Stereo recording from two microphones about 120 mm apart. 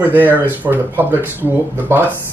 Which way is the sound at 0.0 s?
15° right (ahead or behind).